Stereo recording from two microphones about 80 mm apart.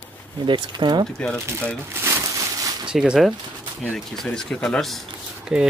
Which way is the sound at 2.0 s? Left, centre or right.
Right.